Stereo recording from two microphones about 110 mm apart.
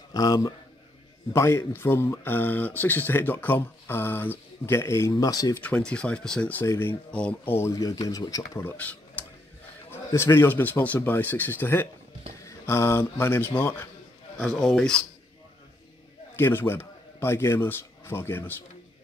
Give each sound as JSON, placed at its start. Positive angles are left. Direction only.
{"t": 0.1, "sound": "a man's voice", "side_deg": 35}
{"t": 1.3, "sound": "speech", "side_deg": 25}
{"t": 5.6, "sound": "speech", "side_deg": 10}
{"t": 6.6, "sound": "speech", "side_deg": 25}
{"t": 8.6, "sound": "speech", "side_deg": 15}
{"t": 9.8, "sound": "a man's voice", "side_deg": 25}
{"t": 14.4, "sound": "speech", "side_deg": 5}
{"t": 16.3, "sound": "a man's voice", "side_deg": 20}